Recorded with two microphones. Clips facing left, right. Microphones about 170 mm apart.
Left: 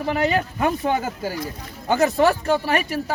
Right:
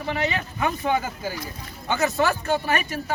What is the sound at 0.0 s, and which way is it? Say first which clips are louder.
Speech: left 5 dB; 40° left (ahead or behind).